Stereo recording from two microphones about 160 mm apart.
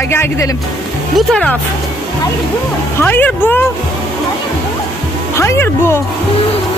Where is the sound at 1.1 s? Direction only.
5° left (ahead or behind).